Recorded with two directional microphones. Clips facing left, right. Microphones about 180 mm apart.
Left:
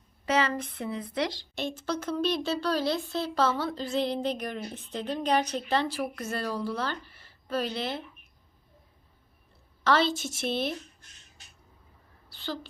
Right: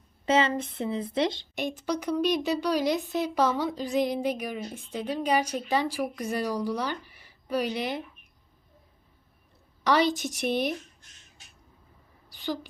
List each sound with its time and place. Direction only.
0.3 s a woman's voice: 25° right (ahead or behind)
9.8 s a woman's voice: 15° right (ahead or behind)
12.3 s a sound: 15° right (ahead or behind)